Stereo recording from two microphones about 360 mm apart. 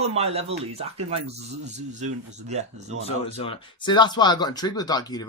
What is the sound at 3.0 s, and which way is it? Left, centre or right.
Speech, centre.